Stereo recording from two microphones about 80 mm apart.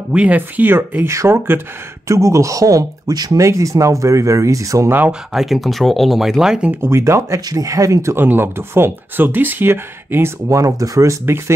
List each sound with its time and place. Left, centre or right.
0.1 s speech: centre
1.1 s speech: right
3.3 s speech: right
5.3 s speech: centre
6.7 s speech: right
10.5 s speech: right